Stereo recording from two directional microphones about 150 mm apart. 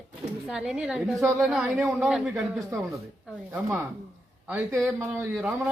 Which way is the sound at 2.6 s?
20° right (ahead or behind).